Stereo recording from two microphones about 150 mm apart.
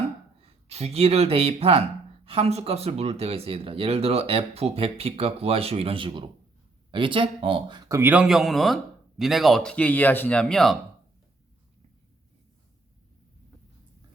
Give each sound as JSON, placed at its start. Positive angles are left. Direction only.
{"t": 0.3, "sound": "speech", "side_deg": -45}